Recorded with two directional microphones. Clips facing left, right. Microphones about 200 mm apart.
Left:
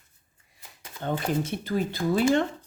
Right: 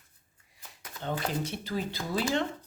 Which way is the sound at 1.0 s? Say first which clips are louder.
Left 5 dB; 50° left (ahead or behind).